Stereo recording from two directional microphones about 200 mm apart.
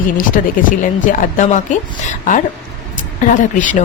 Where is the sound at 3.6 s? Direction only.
40° left (ahead or behind).